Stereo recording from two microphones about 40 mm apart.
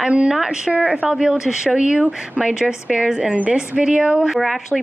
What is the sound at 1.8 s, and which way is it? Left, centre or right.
Speech, right.